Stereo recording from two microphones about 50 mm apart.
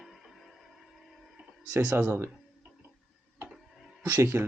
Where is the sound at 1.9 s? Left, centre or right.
Right.